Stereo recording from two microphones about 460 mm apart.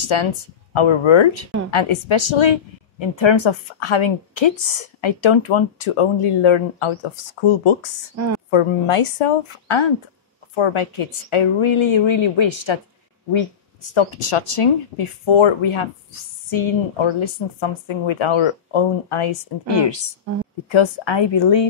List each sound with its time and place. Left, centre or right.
0.1 s speech: left
13.9 s a woman's voice: left